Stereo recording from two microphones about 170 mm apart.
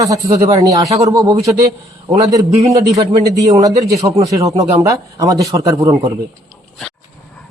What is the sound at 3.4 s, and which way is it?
Speech, 20° right (ahead or behind).